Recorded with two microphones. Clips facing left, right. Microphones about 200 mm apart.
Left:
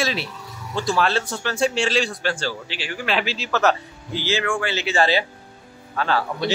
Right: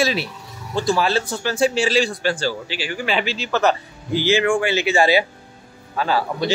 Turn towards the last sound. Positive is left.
turn(degrees=-10)  # may be behind; listen again after turning